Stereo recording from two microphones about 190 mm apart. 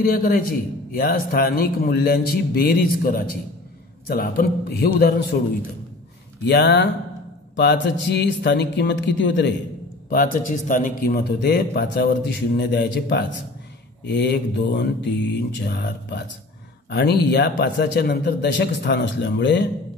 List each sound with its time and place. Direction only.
0.0 s a man's voice: 50° left (ahead or behind); by 9.5 s 70° left (ahead or behind)
10.0 s a man's voice: 45° left (ahead or behind); by 19.7 s 65° left (ahead or behind)